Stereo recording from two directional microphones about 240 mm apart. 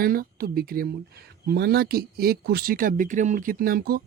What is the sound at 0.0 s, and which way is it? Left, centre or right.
Speech, right.